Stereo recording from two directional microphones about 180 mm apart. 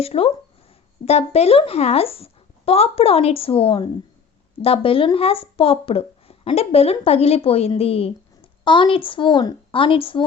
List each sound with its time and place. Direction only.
0.0 s speech: 35° left (ahead or behind)